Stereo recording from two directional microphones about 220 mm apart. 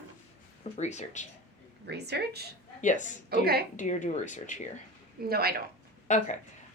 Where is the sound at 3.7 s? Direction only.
35° left (ahead or behind).